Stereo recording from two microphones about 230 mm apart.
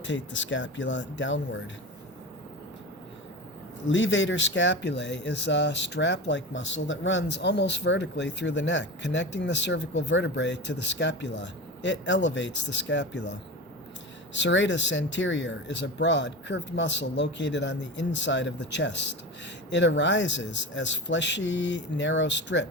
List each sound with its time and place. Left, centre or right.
0.0 s speech: left
3.8 s speech: left
14.3 s speech: left